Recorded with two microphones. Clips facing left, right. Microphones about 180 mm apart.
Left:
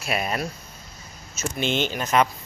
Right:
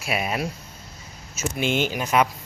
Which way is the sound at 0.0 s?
5° right (ahead or behind).